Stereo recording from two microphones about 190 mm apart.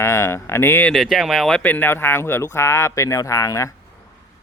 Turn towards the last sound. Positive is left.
turn(degrees=15)  # may be behind; listen again after turning